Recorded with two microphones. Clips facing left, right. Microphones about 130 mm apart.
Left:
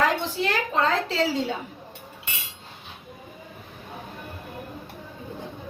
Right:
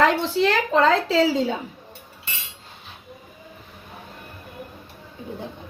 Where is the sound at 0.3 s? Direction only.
90° right.